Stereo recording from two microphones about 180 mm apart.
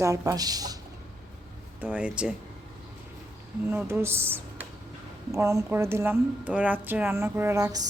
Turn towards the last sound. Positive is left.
turn(degrees=-20)  # may be behind; listen again after turning